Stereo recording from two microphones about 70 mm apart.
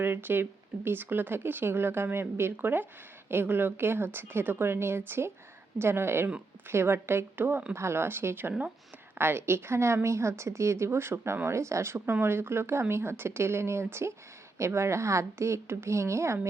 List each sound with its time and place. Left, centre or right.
0.0 s a woman's voice: right